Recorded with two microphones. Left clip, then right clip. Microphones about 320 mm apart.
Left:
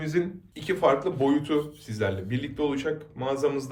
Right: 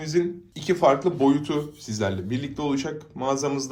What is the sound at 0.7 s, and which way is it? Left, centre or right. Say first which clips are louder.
Speech: right 3 dB; centre.